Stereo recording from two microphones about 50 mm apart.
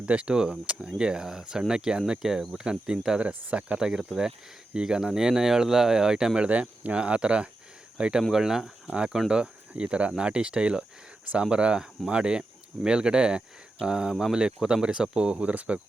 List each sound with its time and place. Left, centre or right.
0.0 s speech: right
3.2 s speech: right
3.8 s speech: centre
6.5 s speech: right
8.3 s speech: centre
9.3 s speech: centre
14.3 s speech: centre